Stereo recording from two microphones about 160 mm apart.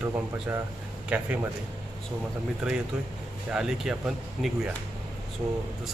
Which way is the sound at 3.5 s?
5° right (ahead or behind).